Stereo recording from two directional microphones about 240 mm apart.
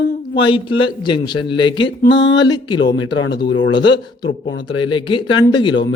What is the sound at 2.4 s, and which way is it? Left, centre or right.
Speech, centre.